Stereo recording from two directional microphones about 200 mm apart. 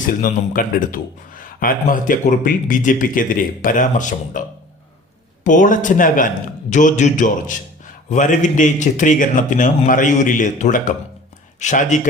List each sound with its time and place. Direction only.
0.0 s a man's voice: 45° left (ahead or behind)